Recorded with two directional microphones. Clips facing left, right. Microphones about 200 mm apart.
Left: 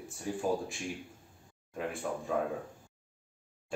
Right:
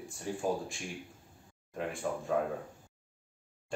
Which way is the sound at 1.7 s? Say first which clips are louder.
Even; centre (ahead or behind).